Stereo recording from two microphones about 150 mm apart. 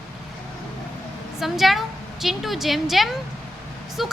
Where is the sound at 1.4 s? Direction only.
Centre (ahead or behind).